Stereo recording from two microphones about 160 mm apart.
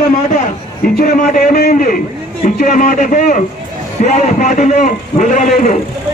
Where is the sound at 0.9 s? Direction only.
60° left (ahead or behind).